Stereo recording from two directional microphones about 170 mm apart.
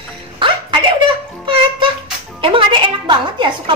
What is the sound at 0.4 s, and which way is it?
Music, 30° right (ahead or behind).